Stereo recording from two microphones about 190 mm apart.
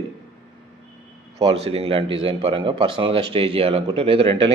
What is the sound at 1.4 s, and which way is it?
Speech, 30° right (ahead or behind).